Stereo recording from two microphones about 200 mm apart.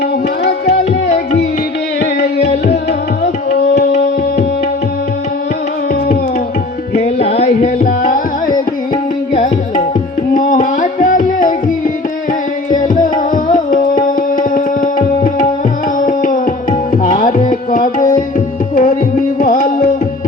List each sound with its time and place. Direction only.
6.9 s music: 30° left (ahead or behind)
10.3 s music: 40° left (ahead or behind)
12.7 s tabla: 40° left (ahead or behind)